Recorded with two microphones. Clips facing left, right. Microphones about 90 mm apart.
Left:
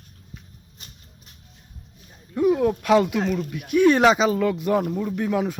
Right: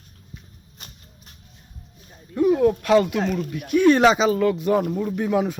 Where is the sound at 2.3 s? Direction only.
5° left (ahead or behind).